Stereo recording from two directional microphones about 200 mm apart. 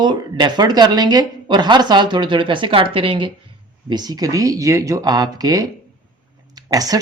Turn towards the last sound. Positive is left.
turn(degrees=-20)  # may be behind; listen again after turning